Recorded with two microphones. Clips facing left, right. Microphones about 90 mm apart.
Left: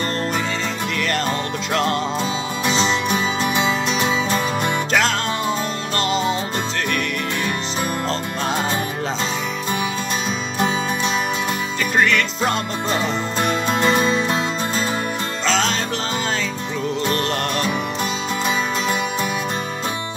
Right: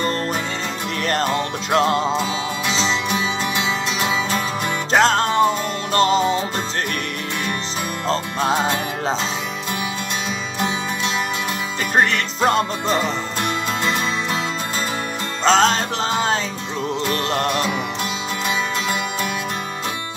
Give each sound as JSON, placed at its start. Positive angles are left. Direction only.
{"t": 1.7, "sound": "music", "side_deg": -30}
{"t": 4.9, "sound": "music", "side_deg": -40}
{"t": 12.0, "sound": "music", "side_deg": -35}
{"t": 13.4, "sound": "music", "side_deg": 30}
{"t": 15.4, "sound": "music", "side_deg": -40}